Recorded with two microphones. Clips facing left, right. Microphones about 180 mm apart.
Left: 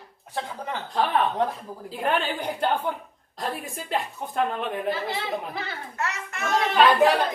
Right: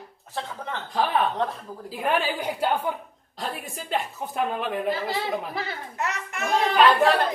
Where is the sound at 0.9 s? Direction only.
Centre (ahead or behind).